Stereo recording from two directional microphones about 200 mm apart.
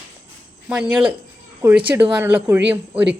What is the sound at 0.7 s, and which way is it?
Speech, 5° right (ahead or behind).